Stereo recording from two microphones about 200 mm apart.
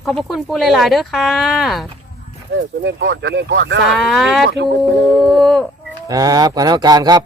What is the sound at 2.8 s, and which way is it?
Speech, 60° right (ahead or behind).